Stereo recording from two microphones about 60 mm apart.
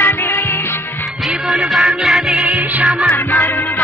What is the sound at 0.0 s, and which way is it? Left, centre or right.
Music, left.